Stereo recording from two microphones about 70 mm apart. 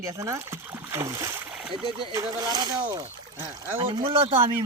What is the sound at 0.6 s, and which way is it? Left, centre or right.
Speech, right.